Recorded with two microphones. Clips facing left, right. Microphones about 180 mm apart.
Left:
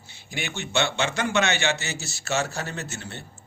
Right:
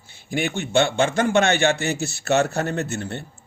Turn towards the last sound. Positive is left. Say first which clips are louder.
# right 9 dB
turn(degrees=-55)  # may be behind; listen again after turning